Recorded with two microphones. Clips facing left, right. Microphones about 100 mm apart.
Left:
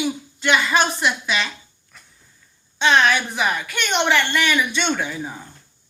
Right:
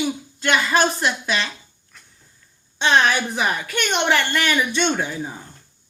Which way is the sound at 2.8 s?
35° right (ahead or behind).